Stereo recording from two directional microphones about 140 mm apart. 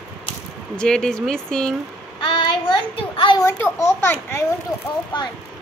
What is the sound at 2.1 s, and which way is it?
Child singing, 35° left (ahead or behind).